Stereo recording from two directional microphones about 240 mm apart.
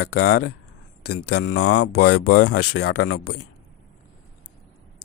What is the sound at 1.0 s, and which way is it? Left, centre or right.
Speech, left.